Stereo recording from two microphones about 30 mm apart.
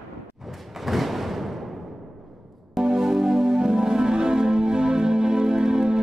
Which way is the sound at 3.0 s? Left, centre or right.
Centre.